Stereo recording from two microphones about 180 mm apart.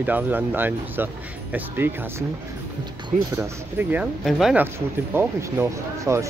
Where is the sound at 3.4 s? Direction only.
10° right (ahead or behind).